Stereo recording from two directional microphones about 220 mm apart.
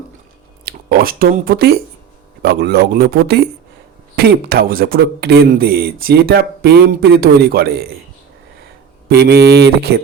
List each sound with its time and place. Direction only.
0.6 s speech: 45° right (ahead or behind)
9.0 s speech: 45° right (ahead or behind)